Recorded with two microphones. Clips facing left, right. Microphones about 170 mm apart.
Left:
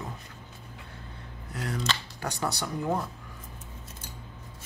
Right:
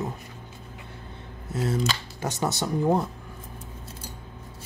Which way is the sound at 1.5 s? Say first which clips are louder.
Right 6 dB; 25° right (ahead or behind).